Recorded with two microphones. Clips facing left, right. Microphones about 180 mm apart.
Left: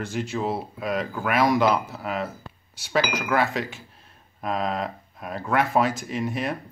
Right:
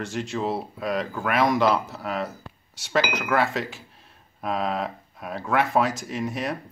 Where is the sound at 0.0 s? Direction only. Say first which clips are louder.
Even; centre (ahead or behind).